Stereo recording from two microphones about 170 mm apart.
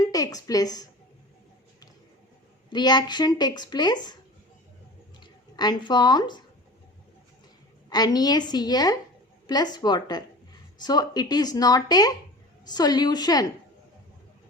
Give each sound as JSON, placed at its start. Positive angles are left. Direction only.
{"t": 0.0, "sound": "a woman's voice", "side_deg": 20}
{"t": 2.6, "sound": "speech", "side_deg": 25}
{"t": 5.2, "sound": "speech", "side_deg": 25}
{"t": 7.9, "sound": "speech", "side_deg": 25}